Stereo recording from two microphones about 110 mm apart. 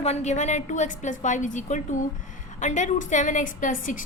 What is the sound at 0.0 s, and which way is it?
A woman's voice, 80° left.